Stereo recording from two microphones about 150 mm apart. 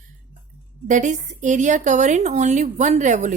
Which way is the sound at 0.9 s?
55° right (ahead or behind).